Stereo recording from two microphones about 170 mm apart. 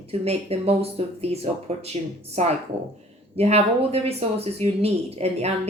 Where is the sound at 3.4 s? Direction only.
40° right (ahead or behind).